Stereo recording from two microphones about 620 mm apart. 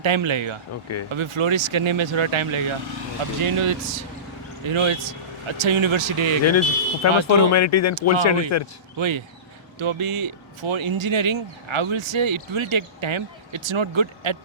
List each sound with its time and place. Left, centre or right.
0.0 s speech: right
6.5 s speech: left
9.0 s speech: right